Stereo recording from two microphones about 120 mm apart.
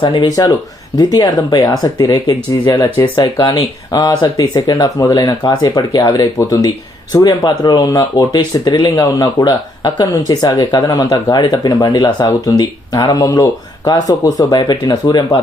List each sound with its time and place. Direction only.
0.0 s speech: 35° left (ahead or behind)